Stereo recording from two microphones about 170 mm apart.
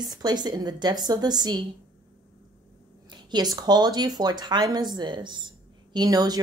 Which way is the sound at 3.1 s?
25° right (ahead or behind).